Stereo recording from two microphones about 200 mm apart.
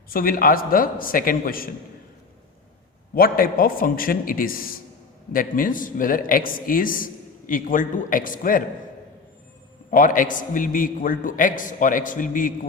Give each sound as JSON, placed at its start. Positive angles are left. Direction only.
{"t": 0.1, "sound": "a man's voice", "side_deg": 45}
{"t": 3.2, "sound": "a man's voice", "side_deg": 45}
{"t": 9.9, "sound": "a man's voice", "side_deg": 45}